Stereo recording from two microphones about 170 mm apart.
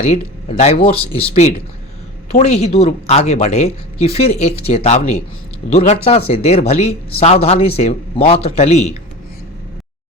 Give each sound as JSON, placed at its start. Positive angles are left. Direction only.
{"t": 0.0, "sound": "speech", "side_deg": 40}